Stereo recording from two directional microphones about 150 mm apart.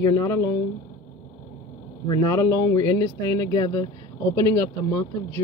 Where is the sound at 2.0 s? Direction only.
25° left (ahead or behind).